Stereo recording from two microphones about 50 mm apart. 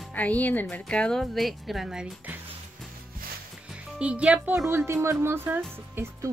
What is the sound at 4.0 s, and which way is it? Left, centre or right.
Speech, right.